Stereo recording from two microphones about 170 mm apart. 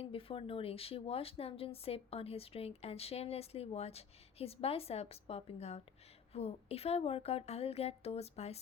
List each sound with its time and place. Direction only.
0.0 s speech: 35° left (ahead or behind)